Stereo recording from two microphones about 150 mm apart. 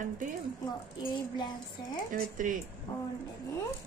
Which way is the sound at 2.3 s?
60° right (ahead or behind).